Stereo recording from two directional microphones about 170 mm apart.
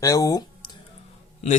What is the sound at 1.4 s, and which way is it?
Speech, 40° left (ahead or behind).